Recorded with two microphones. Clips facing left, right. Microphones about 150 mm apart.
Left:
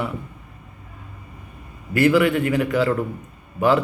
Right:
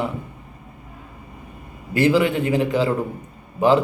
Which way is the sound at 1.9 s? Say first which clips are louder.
Left 1 dB; 25° right (ahead or behind).